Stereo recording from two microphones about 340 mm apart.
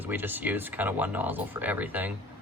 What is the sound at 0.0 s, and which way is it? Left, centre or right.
Speech, centre.